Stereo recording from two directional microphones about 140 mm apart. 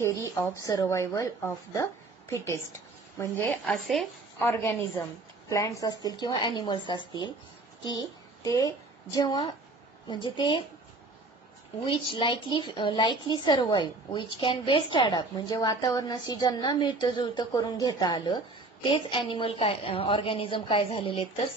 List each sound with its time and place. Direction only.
0.0 s a woman's voice: 20° left (ahead or behind)
3.6 s speech: centre (ahead or behind)
4.4 s a woman's voice: 15° left (ahead or behind); by 10.6 s 35° left (ahead or behind)
11.8 s a woman's voice: 35° left (ahead or behind)